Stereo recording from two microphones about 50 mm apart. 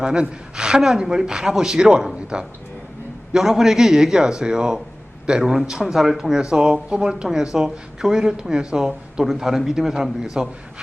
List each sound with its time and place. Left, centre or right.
0.0 s speech: centre